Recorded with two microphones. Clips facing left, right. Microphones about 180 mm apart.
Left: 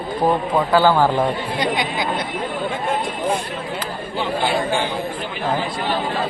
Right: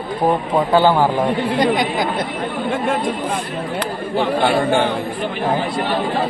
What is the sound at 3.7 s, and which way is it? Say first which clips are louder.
A man's voice: right 8 dB; 60° right (ahead or behind).